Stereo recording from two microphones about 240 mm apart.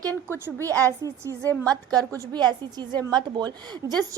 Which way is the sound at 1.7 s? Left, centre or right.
Centre.